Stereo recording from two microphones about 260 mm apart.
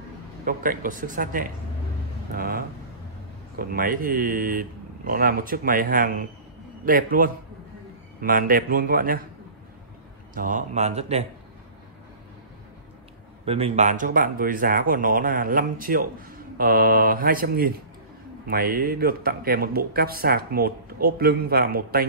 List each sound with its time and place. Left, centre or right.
0.5 s speech: right
10.3 s speech: right
13.5 s speech: right